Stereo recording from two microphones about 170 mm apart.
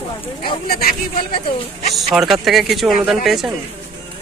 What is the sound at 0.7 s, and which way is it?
Speech, 65° left (ahead or behind).